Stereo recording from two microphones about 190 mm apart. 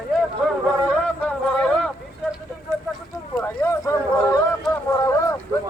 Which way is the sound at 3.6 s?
15° left (ahead or behind).